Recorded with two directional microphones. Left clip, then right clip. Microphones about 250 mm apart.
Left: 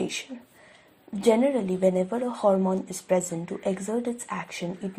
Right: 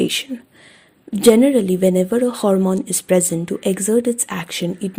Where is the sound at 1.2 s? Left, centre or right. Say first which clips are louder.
Right 9 dB; right.